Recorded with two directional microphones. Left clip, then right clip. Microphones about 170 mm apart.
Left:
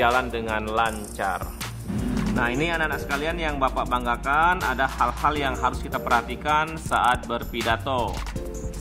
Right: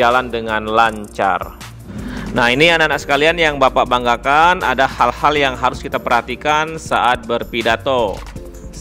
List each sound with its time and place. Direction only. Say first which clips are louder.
0.0 s speech: right 7 dB; 35° right (ahead or behind)
2.3 s speech: right 13 dB; 60° right (ahead or behind); by 8.1 s 40° right (ahead or behind)